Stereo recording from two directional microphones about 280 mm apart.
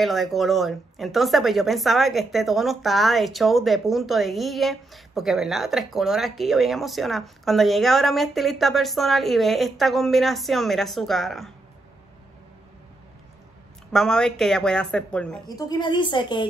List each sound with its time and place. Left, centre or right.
0.0 s speech: centre
13.9 s speech: centre
15.4 s a woman's voice: centre